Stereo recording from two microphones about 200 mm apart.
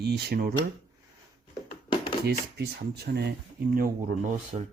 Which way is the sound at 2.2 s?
55° right (ahead or behind).